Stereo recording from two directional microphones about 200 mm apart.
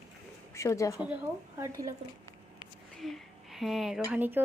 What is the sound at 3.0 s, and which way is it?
Speech, centre (ahead or behind).